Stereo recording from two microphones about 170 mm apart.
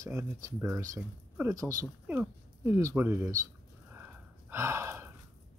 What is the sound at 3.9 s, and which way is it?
Gasp, 10° right (ahead or behind).